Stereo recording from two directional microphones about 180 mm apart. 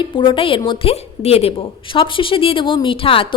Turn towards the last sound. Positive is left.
turn(degrees=30)  # may be behind; listen again after turning